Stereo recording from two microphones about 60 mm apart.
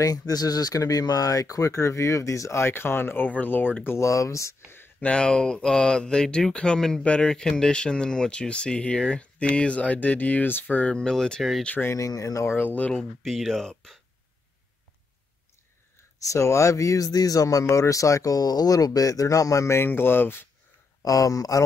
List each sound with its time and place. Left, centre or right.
0.3 s speech: left
1.6 s speech: left
4.0 s speech: left
5.0 s speech: centre
10.9 s speech: centre
12.0 s speech: left
12.4 s speech: left
12.9 s speech: centre
16.2 s speech: left
19.8 s speech: left
21.0 s speech: left